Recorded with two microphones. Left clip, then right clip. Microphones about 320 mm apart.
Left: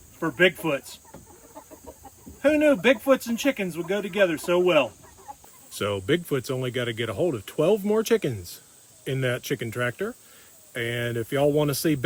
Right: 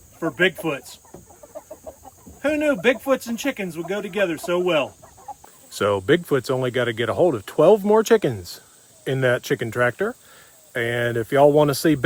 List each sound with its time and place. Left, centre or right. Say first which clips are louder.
0.2 s speech: right 1 dB; centre
2.4 s speech: even; centre
5.7 s speech: right 6 dB; centre